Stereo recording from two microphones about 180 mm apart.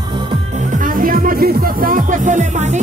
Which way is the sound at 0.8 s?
50° right (ahead or behind).